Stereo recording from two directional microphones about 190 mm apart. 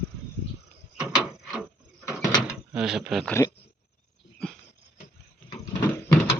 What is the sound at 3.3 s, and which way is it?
Speech, 10° left (ahead or behind).